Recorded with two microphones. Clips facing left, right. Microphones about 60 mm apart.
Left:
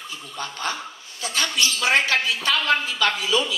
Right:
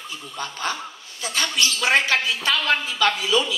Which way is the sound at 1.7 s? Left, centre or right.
Right.